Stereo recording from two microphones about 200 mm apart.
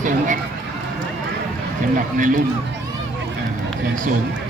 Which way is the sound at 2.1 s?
40° right (ahead or behind).